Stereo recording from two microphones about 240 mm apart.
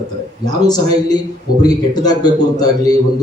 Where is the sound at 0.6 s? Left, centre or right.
Centre.